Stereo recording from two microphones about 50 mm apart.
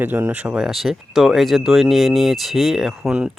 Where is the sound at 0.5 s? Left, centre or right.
Centre.